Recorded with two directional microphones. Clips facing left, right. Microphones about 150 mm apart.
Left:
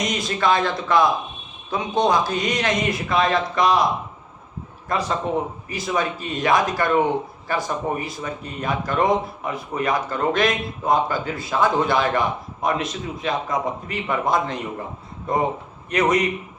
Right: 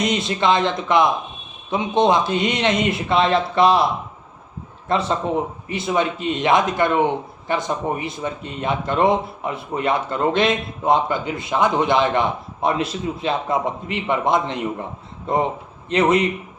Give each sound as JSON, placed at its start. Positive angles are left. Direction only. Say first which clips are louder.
{"t": 0.1, "sound": "speech", "louder": "right 2 dB", "side_deg": -25}
{"t": 4.9, "sound": "speech", "louder": "right 3 dB", "side_deg": -25}